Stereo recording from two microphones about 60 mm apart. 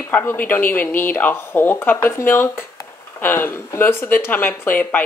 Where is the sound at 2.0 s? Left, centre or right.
Left.